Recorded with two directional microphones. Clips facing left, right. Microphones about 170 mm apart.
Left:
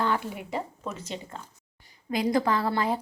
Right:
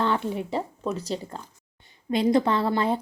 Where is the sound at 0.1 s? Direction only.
30° right (ahead or behind).